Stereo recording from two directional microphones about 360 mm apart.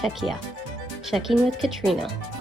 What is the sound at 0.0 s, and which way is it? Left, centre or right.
A woman's voice, centre.